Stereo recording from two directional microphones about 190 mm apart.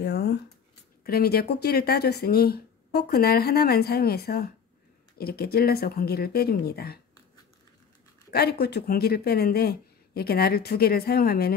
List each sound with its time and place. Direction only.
0.0 s a sound: 60° left (ahead or behind)
1.0 s speech: 55° left (ahead or behind)
8.3 s speech: 55° left (ahead or behind)